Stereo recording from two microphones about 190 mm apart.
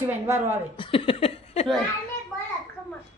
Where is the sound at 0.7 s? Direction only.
25° left (ahead or behind).